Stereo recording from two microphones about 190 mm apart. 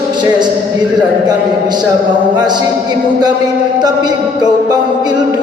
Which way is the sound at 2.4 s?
20° right (ahead or behind).